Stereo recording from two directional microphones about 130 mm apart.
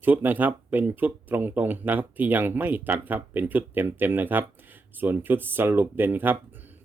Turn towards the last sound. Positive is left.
turn(degrees=-15)  # may be behind; listen again after turning